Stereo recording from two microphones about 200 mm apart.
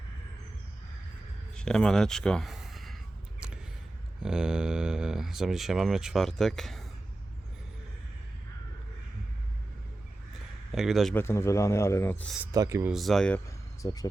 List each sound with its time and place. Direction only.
1.5 s speech: 5° left (ahead or behind)
4.2 s speech: 5° right (ahead or behind)
10.7 s a man's voice: centre (ahead or behind)
11.2 s a man's voice: 10° left (ahead or behind)
12.4 s speech: 15° right (ahead or behind)
12.9 s a man's voice: centre (ahead or behind)
13.8 s a man's voice: 20° left (ahead or behind)